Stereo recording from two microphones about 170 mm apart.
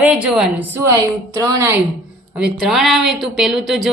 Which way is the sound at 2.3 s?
5° right (ahead or behind).